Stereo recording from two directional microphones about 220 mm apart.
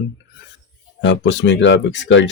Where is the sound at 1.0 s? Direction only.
55° left (ahead or behind).